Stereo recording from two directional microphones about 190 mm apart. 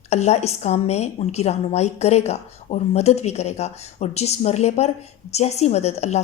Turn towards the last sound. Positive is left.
turn(degrees=35)  # may be behind; listen again after turning